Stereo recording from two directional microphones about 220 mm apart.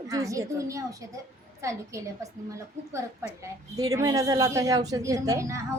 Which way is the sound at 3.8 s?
15° right (ahead or behind).